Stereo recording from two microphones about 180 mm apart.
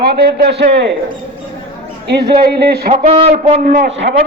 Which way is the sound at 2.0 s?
65° right (ahead or behind).